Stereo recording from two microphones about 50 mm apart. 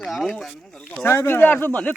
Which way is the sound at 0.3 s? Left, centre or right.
Centre.